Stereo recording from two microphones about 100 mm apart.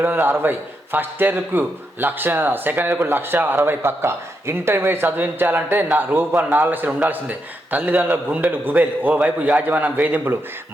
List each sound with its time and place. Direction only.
0.0 s a man's voice: 20° right (ahead or behind)